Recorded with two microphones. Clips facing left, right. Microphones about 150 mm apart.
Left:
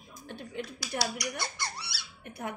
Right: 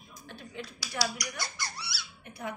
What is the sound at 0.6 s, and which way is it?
A woman's voice, 50° left (ahead or behind).